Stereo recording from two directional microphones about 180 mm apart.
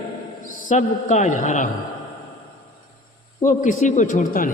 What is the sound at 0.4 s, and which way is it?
A man's voice, 45° left (ahead or behind).